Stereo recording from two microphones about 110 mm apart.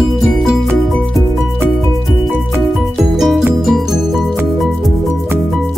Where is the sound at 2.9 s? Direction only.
5° right (ahead or behind).